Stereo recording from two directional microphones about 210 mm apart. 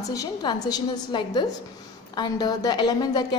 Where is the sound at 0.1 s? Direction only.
20° left (ahead or behind).